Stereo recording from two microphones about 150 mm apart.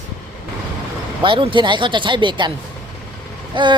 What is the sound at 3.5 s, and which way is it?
Speech, 30° right (ahead or behind).